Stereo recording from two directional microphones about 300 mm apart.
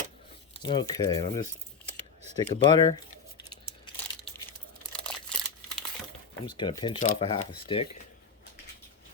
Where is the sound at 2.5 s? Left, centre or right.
Centre.